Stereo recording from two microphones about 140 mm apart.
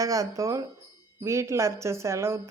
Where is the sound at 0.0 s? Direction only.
25° right (ahead or behind).